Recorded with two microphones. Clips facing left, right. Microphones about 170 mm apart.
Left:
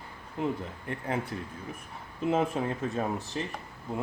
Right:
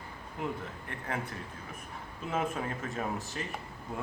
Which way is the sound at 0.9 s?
30° left (ahead or behind).